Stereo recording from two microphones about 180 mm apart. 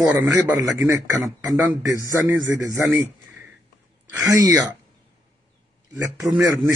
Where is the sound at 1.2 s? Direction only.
20° right (ahead or behind).